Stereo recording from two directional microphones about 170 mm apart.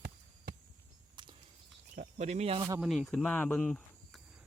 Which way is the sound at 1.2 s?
25° right (ahead or behind).